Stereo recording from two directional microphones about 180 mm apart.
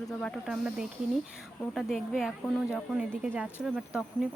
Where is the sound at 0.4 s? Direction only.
5° right (ahead or behind).